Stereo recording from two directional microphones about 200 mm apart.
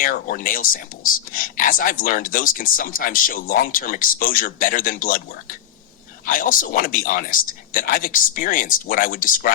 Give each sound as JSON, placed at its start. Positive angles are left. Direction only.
{"t": 0.0, "sound": "speech", "side_deg": 45}